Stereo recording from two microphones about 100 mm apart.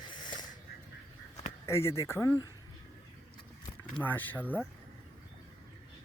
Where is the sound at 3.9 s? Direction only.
20° left (ahead or behind).